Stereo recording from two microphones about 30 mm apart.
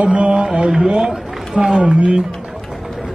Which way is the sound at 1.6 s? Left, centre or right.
Right.